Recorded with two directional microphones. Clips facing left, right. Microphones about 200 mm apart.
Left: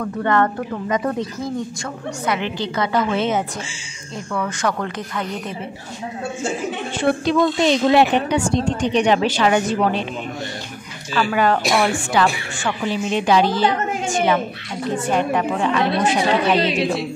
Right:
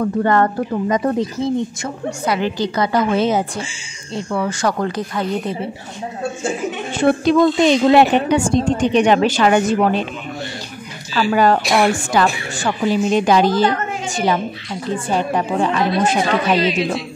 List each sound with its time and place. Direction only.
0.0 s speech: 35° right (ahead or behind)
7.0 s a woman's voice: 45° right (ahead or behind)
11.1 s speech: 35° right (ahead or behind)